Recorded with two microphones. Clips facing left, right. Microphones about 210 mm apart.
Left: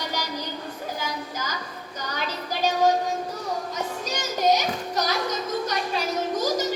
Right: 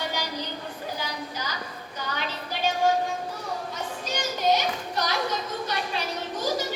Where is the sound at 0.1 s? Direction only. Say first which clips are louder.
Left 1 dB; 45° left (ahead or behind).